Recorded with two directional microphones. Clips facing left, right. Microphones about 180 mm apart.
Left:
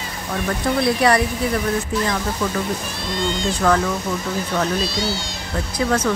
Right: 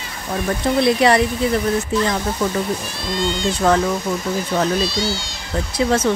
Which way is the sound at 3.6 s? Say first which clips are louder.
Right 2 dB; 25° right (ahead or behind).